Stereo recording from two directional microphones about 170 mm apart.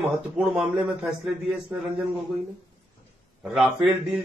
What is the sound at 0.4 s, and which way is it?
A man's voice, 5° right (ahead or behind).